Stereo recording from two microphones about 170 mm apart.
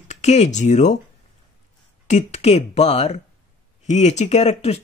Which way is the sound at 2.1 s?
45° left (ahead or behind).